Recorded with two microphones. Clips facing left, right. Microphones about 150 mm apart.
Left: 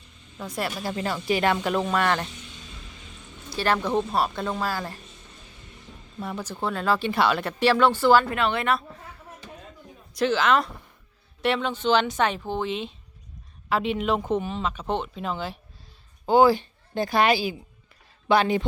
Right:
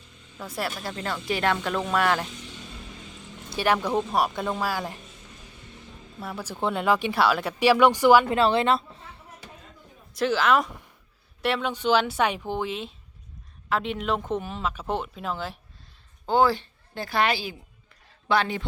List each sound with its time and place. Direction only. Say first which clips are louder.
0.3 s speech: left 1 dB; 5° right (ahead or behind)
2.0 s speech: right 4 dB; 5° right (ahead or behind)
3.6 s speech: even; 10° right (ahead or behind)
6.1 s speech: left 1 dB; 5° right (ahead or behind)
7.1 s speech: even; 5° right (ahead or behind)
8.4 s a woman's voice: right 3 dB; 30° right (ahead or behind)
10.2 s speech: even; 5° right (ahead or behind)
16.2 s a woman's voice: left 4 dB; 10° left (ahead or behind)